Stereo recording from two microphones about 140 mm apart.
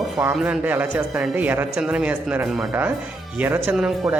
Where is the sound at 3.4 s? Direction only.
15° right (ahead or behind).